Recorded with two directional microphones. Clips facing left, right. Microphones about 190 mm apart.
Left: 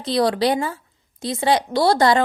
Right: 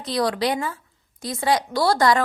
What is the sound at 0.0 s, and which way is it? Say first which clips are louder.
Speech: left 4 dB; 30° left (ahead or behind).